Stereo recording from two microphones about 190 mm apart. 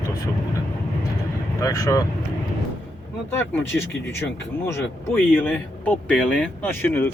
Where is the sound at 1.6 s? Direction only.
20° left (ahead or behind).